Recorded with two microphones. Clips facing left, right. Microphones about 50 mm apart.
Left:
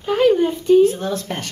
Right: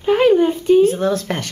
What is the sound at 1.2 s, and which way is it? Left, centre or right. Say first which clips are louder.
Speech: right 3 dB; right.